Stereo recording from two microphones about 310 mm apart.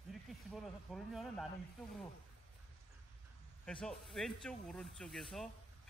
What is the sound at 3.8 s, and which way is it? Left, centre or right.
Speech, centre.